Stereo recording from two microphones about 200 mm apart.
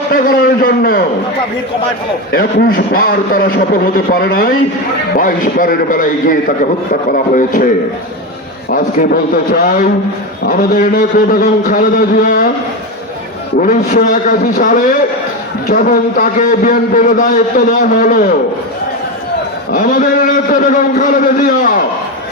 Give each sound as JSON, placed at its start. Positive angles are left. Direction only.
{"t": 0.1, "sound": "a man's voice", "side_deg": 45}
{"t": 2.3, "sound": "a man's voice", "side_deg": 50}
{"t": 8.7, "sound": "a man's voice", "side_deg": 45}
{"t": 13.6, "sound": "a man's voice", "side_deg": 40}
{"t": 19.7, "sound": "a man's voice", "side_deg": 40}